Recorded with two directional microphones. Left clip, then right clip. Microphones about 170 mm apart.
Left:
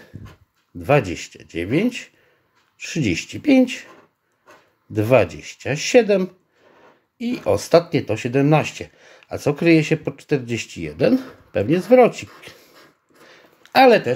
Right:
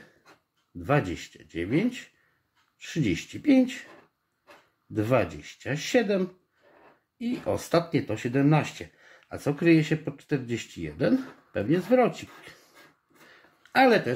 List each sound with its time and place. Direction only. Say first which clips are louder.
0.7 s speech: left 8 dB; 30° left (ahead or behind)
4.9 s speech: left 9 dB; 30° left (ahead or behind)
13.3 s a sound: left 9 dB; 30° left (ahead or behind)